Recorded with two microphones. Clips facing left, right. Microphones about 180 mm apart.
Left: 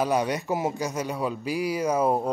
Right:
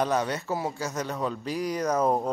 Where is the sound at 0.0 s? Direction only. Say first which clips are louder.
Left 2 dB; 10° left (ahead or behind).